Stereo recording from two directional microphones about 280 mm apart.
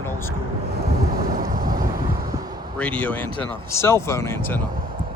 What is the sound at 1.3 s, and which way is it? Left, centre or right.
Vehicle, right.